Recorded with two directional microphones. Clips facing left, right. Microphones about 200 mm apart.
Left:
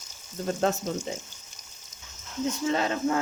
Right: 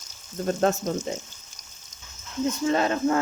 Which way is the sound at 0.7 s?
50° right (ahead or behind).